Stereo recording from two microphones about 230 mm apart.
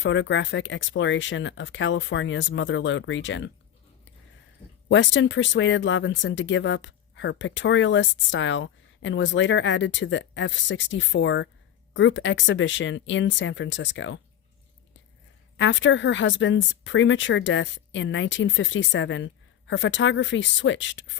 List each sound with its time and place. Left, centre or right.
0.0 s speech: left
4.9 s speech: left
15.5 s speech: left